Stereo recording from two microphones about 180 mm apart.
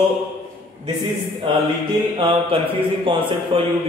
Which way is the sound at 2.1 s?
30° right (ahead or behind).